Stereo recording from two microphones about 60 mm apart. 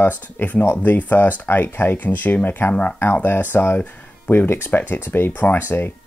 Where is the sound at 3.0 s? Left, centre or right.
Left.